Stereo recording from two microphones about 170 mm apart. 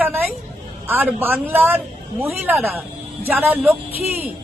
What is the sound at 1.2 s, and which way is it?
Speech, 10° right (ahead or behind).